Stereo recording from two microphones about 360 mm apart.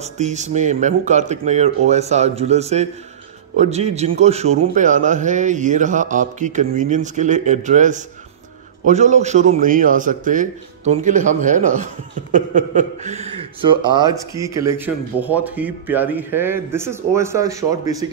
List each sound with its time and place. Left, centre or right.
0.0 s a man's voice: centre